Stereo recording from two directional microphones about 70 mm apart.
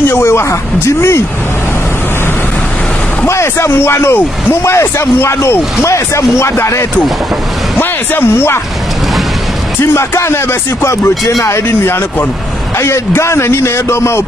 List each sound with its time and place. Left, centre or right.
0.0 s a man's voice: left
3.3 s a man's voice: left
7.8 s speech: left
9.9 s a man's voice: left